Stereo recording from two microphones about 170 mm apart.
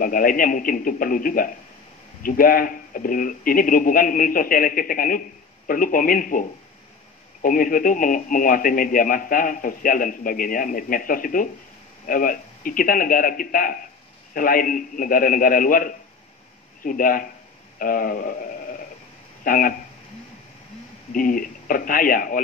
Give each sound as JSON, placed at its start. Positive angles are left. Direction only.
{"t": 0.0, "sound": "speech", "side_deg": 55}
{"t": 7.4, "sound": "speech", "side_deg": 55}
{"t": 19.4, "sound": "speech", "side_deg": 55}
{"t": 21.1, "sound": "speech", "side_deg": 55}